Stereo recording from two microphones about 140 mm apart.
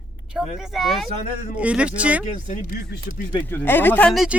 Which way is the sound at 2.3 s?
75° left (ahead or behind).